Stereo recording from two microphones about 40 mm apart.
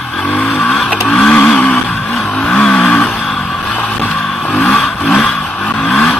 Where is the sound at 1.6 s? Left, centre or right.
Left.